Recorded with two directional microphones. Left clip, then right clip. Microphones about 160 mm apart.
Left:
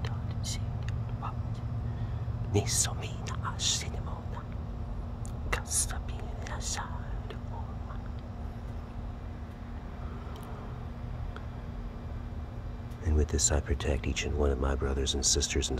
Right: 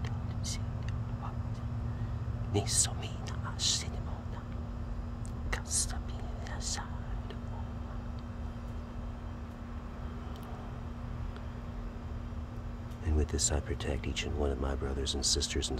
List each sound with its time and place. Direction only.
2.5 s speech: 10° left (ahead or behind)
5.5 s a sound: 10° left (ahead or behind)
6.5 s whispering: 10° left (ahead or behind)
13.0 s speech: 5° left (ahead or behind)